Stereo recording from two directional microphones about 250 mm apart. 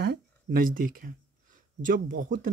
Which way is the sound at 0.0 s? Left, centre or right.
Right.